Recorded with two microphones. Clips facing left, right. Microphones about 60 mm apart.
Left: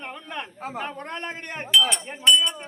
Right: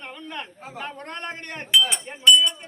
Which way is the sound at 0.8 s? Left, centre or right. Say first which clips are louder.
Even; centre.